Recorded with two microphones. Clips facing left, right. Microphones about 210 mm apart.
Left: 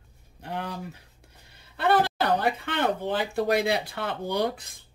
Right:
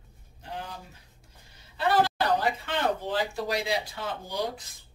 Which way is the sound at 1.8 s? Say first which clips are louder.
Left 2 dB; 60° left (ahead or behind).